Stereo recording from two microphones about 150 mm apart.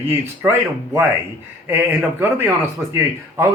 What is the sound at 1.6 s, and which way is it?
Speech, 15° right (ahead or behind).